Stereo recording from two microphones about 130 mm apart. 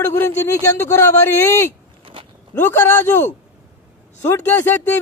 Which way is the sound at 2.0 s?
45° right (ahead or behind).